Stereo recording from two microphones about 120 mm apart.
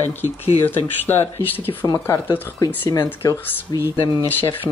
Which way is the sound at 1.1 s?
20° left (ahead or behind).